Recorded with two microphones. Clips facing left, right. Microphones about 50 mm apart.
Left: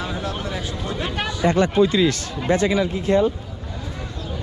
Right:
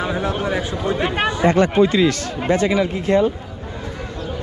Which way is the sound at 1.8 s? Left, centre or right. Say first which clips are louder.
Right 2 dB; right.